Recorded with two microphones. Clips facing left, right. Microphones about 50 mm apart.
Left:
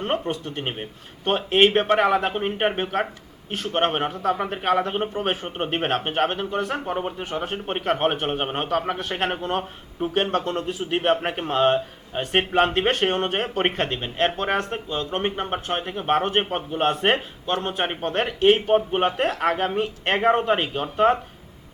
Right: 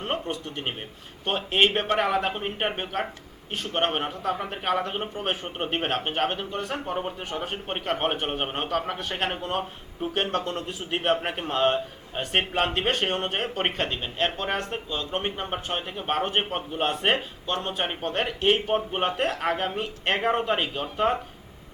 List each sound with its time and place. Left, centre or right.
0.3 s speech: left; by 7.3 s centre
7.3 s speech: left